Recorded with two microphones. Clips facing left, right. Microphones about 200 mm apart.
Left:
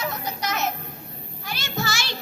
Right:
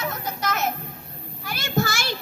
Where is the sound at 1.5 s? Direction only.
55° right (ahead or behind).